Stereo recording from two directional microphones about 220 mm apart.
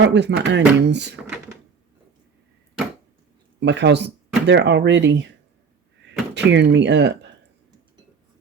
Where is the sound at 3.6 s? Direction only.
50° right (ahead or behind).